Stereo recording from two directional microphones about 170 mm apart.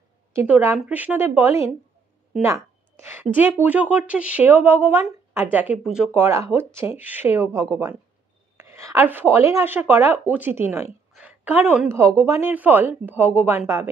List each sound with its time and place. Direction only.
0.3 s a woman's voice: 15° right (ahead or behind)
11.1 s a sound: 10° right (ahead or behind)
12.2 s a woman's voice: 15° right (ahead or behind)